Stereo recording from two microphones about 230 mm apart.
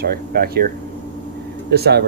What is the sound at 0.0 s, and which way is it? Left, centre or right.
Speech, right.